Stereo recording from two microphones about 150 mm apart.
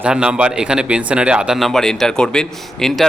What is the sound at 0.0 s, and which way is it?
Speech, 5° right (ahead or behind).